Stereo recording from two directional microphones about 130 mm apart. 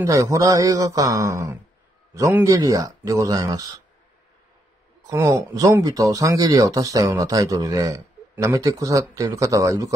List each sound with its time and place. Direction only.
0.0 s speech: 25° right (ahead or behind)
5.0 s speech: 25° right (ahead or behind)